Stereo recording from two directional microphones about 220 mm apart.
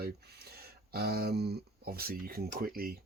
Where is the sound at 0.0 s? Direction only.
45° right (ahead or behind).